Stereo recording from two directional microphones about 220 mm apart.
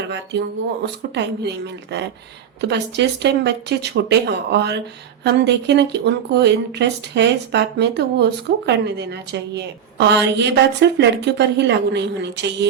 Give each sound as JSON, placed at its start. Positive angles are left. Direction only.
{"t": 0.1, "sound": "a woman's voice", "side_deg": -50}